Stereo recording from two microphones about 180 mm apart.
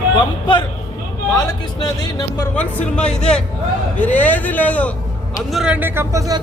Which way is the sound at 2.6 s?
5° left (ahead or behind).